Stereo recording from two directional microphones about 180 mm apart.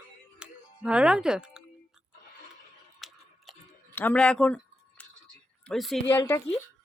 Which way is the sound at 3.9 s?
10° left (ahead or behind).